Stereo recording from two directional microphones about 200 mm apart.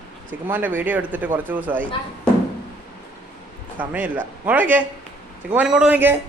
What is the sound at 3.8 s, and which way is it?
Speech, 10° right (ahead or behind).